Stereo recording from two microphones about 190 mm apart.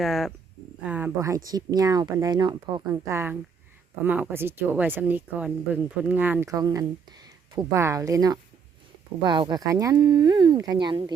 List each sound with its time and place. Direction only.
0.0 s speech: centre (ahead or behind); by 11.1 s 25° right (ahead or behind)